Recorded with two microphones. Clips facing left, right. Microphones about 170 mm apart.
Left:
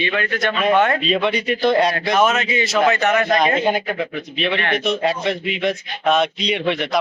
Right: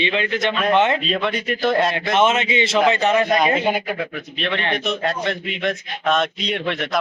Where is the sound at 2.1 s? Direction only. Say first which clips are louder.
Right 2 dB; 25° right (ahead or behind).